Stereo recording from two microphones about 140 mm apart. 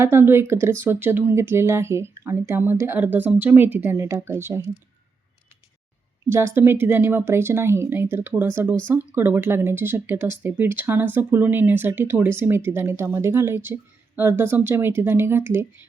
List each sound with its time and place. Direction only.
0.0 s speech: 15° right (ahead or behind)
6.2 s speech: 20° right (ahead or behind)